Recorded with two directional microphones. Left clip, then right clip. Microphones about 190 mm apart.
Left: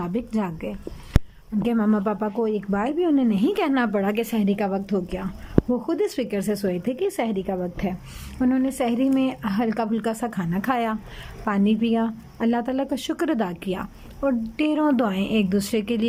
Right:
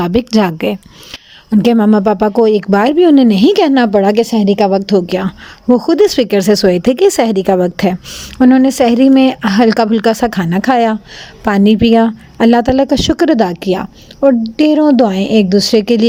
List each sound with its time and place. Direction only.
0.0 s speech: 50° right (ahead or behind)
1.5 s a woman's voice: 40° right (ahead or behind)